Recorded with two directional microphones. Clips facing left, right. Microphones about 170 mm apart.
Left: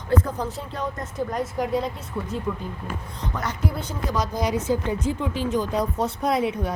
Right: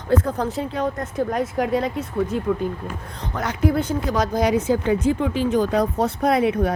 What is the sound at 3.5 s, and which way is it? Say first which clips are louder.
Speech: right 8 dB; 55° right (ahead or behind).